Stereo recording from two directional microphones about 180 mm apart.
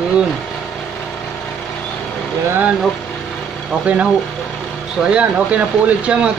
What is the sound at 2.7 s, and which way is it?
Vehicle, 5° left (ahead or behind).